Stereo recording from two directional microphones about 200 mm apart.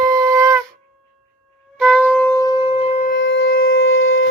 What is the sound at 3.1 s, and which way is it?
Shofar, 65° left (ahead or behind).